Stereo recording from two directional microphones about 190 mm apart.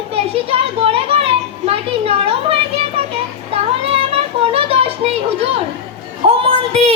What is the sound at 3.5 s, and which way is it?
Child singing, 30° right (ahead or behind).